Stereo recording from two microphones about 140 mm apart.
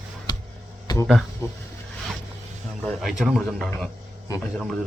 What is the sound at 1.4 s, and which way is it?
Speech, 20° left (ahead or behind).